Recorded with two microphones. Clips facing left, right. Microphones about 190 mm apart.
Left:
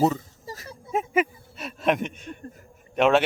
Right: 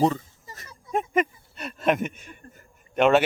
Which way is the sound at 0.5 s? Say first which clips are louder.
Left 8 dB; 35° left (ahead or behind).